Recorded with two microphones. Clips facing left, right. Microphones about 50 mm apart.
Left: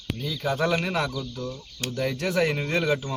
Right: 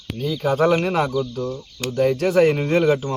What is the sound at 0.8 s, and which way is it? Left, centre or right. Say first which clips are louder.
Speech: right 7 dB; right.